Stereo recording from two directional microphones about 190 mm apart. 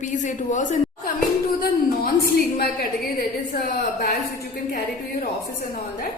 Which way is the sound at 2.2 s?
55° left (ahead or behind).